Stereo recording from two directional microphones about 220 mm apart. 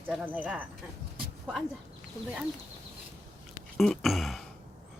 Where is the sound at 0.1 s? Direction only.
Centre (ahead or behind).